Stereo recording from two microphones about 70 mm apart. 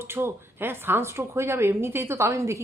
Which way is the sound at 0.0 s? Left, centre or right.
Right.